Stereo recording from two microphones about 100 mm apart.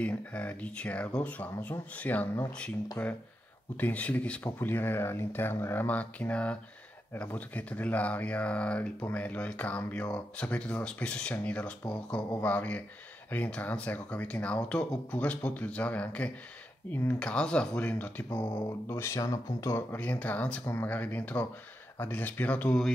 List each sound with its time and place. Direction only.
0.0 s speech: 15° left (ahead or behind)
3.7 s speech: 15° left (ahead or behind)
17.2 s speech: 10° left (ahead or behind)
18.6 s speech: 30° left (ahead or behind)